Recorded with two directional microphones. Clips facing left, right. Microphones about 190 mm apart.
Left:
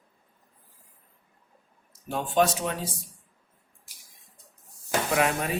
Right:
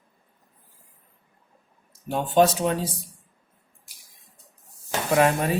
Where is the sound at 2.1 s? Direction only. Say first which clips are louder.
Right 4 dB; 30° right (ahead or behind).